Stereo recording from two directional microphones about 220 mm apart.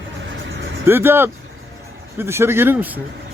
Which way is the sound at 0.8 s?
10° right (ahead or behind).